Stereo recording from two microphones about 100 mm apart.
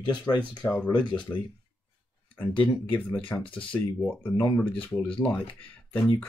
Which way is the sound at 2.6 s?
15° left (ahead or behind).